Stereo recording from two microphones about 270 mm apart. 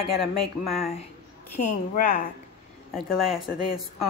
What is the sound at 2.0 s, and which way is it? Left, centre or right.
Speech, left.